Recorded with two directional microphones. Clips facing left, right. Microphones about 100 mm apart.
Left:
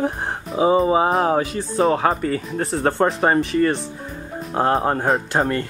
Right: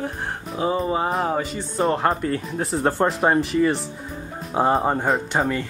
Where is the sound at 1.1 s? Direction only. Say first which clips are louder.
Left 4 dB; 5° left (ahead or behind).